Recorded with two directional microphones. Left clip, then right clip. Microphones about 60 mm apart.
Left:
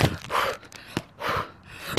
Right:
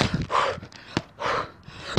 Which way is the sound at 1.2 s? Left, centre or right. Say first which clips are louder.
Right 2 dB; right.